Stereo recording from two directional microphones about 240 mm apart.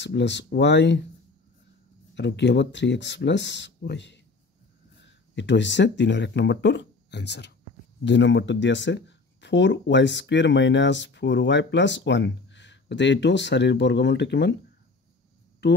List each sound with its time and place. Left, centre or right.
0.0 s speech: left
2.1 s speech: left